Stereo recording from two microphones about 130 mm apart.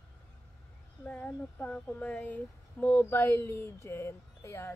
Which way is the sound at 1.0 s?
10° left (ahead or behind).